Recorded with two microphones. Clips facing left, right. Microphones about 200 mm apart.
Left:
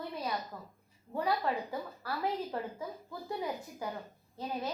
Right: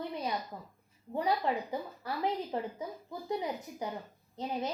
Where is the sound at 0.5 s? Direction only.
15° right (ahead or behind).